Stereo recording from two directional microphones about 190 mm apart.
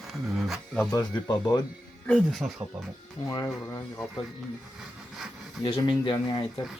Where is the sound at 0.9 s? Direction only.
15° left (ahead or behind).